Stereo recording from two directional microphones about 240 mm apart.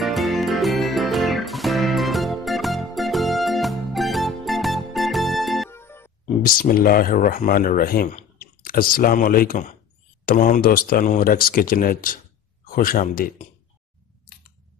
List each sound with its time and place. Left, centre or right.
0.0 s music: centre
6.4 s speech: left